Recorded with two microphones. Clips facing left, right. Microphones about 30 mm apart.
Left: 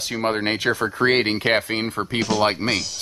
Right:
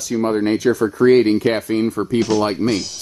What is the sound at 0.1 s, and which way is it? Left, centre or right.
Speech, left.